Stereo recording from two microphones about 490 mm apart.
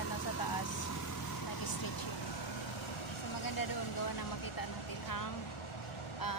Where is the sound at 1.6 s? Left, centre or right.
Left.